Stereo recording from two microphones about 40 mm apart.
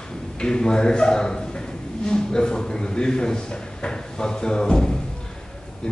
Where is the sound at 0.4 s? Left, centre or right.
Centre.